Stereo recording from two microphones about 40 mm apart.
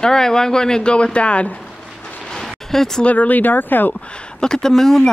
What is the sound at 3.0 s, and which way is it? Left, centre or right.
Speech, left.